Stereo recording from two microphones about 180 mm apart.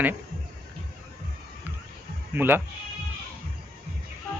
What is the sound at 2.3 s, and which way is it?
Speech, 10° right (ahead or behind).